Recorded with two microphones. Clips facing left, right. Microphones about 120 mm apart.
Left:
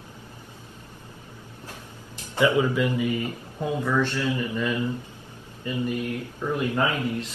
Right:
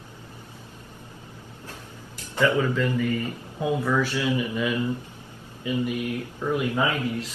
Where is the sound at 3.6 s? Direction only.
5° right (ahead or behind).